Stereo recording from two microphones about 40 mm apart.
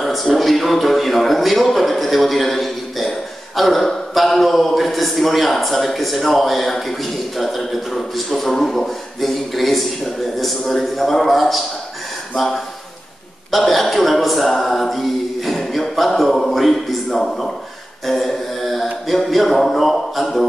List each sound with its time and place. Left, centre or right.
0.0 s a man's voice: centre
18.0 s a sound: centre
19.5 s speech: centre